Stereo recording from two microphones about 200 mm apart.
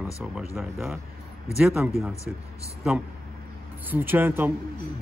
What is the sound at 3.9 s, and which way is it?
Speech, 10° right (ahead or behind).